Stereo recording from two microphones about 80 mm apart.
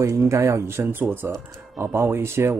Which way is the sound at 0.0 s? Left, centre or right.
Right.